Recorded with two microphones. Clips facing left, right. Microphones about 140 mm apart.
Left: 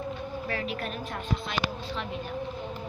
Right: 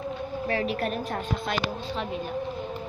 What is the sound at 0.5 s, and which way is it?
A woman's voice, 35° right (ahead or behind).